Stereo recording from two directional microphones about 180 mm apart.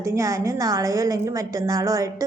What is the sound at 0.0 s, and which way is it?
A woman's voice, 15° right (ahead or behind).